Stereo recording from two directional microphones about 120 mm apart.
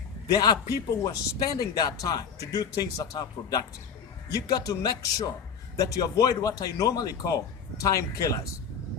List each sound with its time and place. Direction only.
0.3 s speech: 30° left (ahead or behind)